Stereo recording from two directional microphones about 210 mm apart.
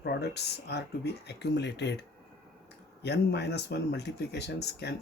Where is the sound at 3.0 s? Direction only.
50° left (ahead or behind).